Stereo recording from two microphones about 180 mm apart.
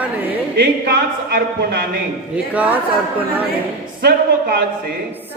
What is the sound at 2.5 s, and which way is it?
Speech, 10° right (ahead or behind).